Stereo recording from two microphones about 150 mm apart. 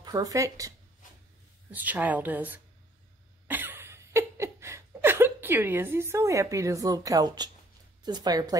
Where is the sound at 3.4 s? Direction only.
15° right (ahead or behind).